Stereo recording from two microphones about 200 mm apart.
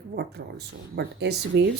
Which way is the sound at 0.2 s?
55° right (ahead or behind).